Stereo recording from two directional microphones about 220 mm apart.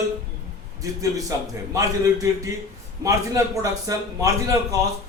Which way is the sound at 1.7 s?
15° right (ahead or behind).